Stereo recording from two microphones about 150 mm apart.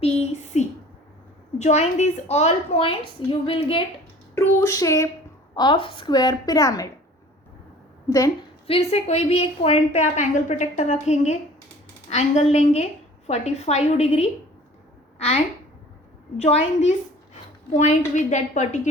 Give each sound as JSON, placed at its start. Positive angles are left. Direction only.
{"t": 0.0, "sound": "a sound", "side_deg": 45}
{"t": 1.5, "sound": "a woman's voice", "side_deg": 50}
{"t": 4.4, "sound": "a woman's voice", "side_deg": 20}
{"t": 5.5, "sound": "a woman's voice", "side_deg": 30}
{"t": 8.6, "sound": "a woman's voice", "side_deg": 45}
{"t": 16.4, "sound": "a woman's voice", "side_deg": 45}